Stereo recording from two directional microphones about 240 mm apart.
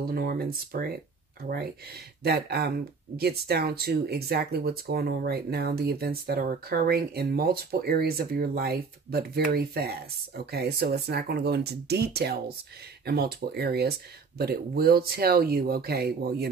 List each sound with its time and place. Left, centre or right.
0.0 s speech: right